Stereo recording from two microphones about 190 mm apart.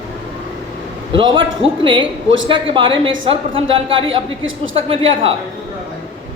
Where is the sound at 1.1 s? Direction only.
25° right (ahead or behind).